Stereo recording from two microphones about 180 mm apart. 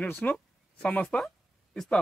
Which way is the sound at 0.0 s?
10° left (ahead or behind).